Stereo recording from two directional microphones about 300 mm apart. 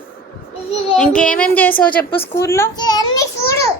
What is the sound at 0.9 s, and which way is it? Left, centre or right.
Speech, centre.